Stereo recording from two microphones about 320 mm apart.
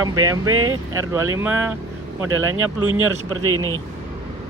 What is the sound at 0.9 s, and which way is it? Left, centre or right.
Speech, centre.